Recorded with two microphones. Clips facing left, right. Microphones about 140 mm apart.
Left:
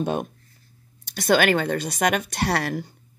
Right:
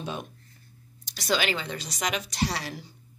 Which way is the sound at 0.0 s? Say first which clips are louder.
Left 10 dB; 55° left (ahead or behind).